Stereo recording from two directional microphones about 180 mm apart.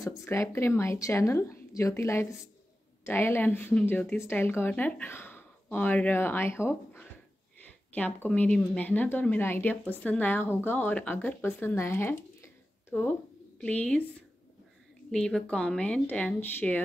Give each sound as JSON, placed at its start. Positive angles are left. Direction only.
{"t": 0.2, "sound": "a woman's voice", "side_deg": 15}
{"t": 15.0, "sound": "speech", "side_deg": 5}